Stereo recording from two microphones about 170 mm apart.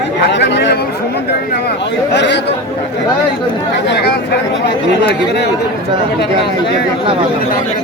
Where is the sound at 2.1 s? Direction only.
90° left.